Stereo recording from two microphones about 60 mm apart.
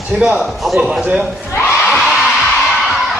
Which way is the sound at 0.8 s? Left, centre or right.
Centre.